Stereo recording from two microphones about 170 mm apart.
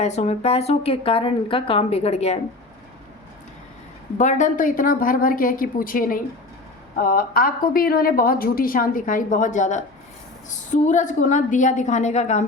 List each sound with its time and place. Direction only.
0.0 s speech: 40° left (ahead or behind)
4.2 s a woman's voice: 45° left (ahead or behind)